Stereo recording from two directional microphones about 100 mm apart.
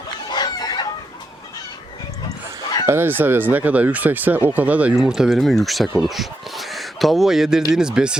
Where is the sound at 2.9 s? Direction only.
20° right (ahead or behind).